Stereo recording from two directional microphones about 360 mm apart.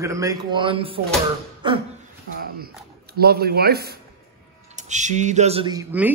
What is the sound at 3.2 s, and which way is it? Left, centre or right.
Speech, right.